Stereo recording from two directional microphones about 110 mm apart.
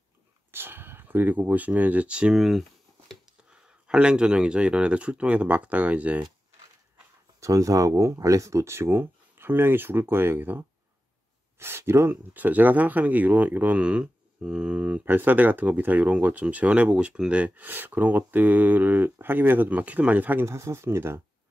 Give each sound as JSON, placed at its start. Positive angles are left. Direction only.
{"t": 0.5, "sound": "speech", "side_deg": -20}
{"t": 7.3, "sound": "speech", "side_deg": -30}